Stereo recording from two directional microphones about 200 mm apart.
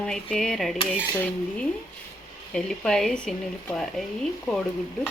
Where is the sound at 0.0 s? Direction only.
5° left (ahead or behind).